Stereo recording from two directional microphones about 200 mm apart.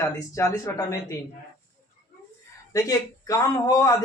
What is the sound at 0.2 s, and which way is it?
Speech, 15° left (ahead or behind).